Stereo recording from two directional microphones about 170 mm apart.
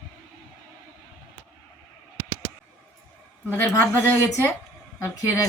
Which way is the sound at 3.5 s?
15° left (ahead or behind).